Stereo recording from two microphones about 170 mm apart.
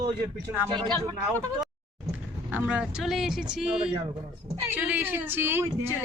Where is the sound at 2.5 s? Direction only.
10° right (ahead or behind).